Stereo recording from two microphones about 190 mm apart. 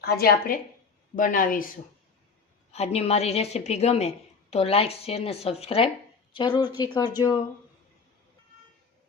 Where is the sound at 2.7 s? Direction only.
35° left (ahead or behind).